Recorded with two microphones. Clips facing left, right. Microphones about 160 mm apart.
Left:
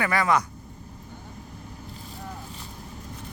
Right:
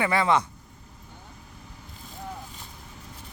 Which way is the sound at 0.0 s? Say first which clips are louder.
Even; 25° right (ahead or behind).